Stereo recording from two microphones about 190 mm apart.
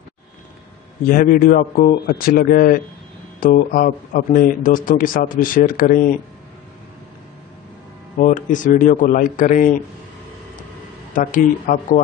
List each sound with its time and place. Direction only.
1.0 s speech: 45° left (ahead or behind)
8.2 s speech: 45° left (ahead or behind)
11.1 s speech: 45° left (ahead or behind)